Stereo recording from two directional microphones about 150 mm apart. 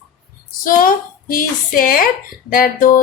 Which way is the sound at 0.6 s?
70° left (ahead or behind).